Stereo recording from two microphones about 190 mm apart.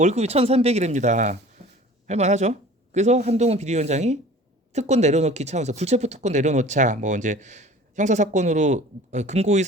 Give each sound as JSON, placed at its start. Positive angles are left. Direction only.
{"t": 0.0, "sound": "speech", "side_deg": -35}